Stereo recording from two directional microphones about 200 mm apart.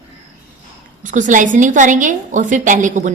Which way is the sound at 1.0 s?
40° right (ahead or behind).